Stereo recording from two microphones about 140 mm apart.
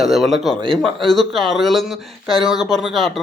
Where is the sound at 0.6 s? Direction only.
40° right (ahead or behind).